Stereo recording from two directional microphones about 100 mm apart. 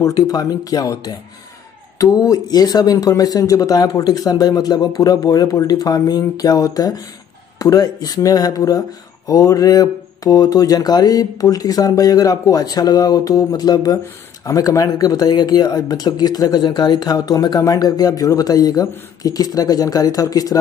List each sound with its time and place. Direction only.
0.0 s speech: 35° left (ahead or behind)